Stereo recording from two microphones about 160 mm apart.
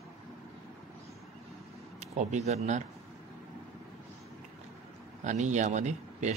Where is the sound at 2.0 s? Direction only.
45° right (ahead or behind).